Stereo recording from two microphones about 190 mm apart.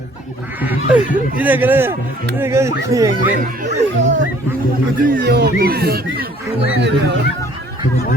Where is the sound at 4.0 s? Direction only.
70° right (ahead or behind).